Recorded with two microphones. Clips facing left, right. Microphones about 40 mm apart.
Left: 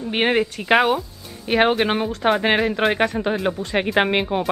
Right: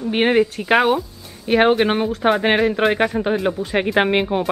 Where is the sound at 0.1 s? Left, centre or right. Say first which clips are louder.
Right 3 dB; centre.